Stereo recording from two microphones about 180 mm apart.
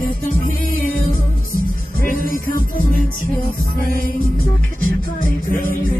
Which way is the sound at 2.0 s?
50° left (ahead or behind).